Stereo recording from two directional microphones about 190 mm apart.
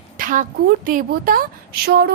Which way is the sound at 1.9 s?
55° right (ahead or behind).